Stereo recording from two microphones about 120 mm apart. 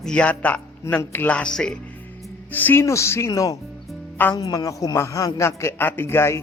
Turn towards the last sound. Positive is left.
turn(degrees=20)  # may be behind; listen again after turning